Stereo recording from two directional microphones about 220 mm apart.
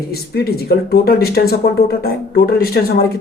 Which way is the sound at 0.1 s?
45° left (ahead or behind).